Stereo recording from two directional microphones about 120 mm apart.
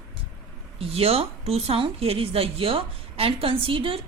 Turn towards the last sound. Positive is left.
turn(degrees=-50)  # may be behind; listen again after turning